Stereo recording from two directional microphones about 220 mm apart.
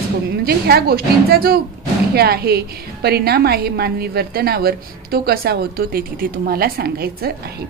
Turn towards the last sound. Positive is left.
turn(degrees=-45)  # may be behind; listen again after turning